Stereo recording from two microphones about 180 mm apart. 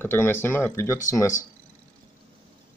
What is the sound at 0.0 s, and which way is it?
Speech, 10° left (ahead or behind).